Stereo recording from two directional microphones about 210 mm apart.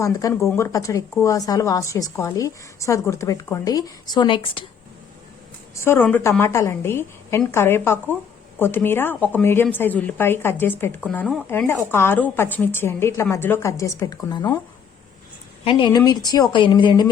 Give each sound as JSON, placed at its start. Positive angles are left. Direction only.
{"t": 0.0, "sound": "a woman's voice", "side_deg": 15}
{"t": 5.7, "sound": "a woman's voice", "side_deg": 10}
{"t": 15.6, "sound": "a woman's voice", "side_deg": 20}